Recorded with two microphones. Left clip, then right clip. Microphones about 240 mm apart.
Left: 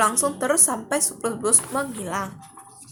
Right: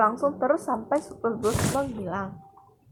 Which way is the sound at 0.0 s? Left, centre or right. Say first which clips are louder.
Left 1 dB; left.